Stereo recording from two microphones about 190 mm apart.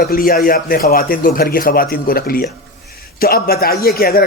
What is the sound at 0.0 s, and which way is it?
Speech, 50° left (ahead or behind).